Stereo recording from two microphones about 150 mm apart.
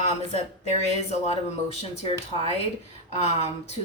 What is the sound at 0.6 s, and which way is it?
Speech, 45° left (ahead or behind).